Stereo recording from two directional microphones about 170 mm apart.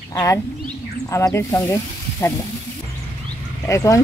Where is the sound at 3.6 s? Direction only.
20° left (ahead or behind).